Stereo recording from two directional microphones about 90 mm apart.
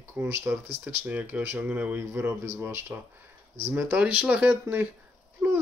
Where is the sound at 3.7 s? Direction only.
10° right (ahead or behind).